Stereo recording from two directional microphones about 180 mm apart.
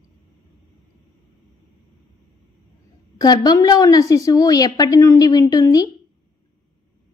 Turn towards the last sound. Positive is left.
turn(degrees=20)  # may be behind; listen again after turning